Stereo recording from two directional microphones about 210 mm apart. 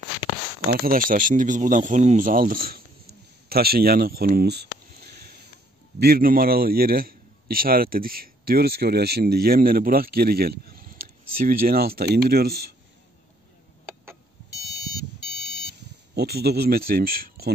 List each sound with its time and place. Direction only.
0.7 s a man's voice: 45° right (ahead or behind)
16.2 s a man's voice: 50° right (ahead or behind)